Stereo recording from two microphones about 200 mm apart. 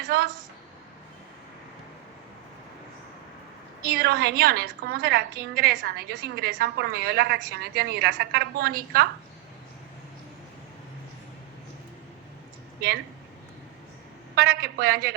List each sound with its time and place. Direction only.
0.0 s a sound: 50° right (ahead or behind)
3.9 s a woman's voice: 55° right (ahead or behind)
14.3 s a woman's voice: 50° right (ahead or behind)